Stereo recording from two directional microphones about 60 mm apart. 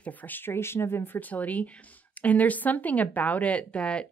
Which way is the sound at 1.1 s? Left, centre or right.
Left.